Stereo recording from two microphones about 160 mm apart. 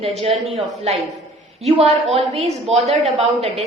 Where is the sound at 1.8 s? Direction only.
40° right (ahead or behind).